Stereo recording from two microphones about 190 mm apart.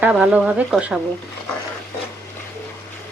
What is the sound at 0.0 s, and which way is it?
Speech, 5° right (ahead or behind).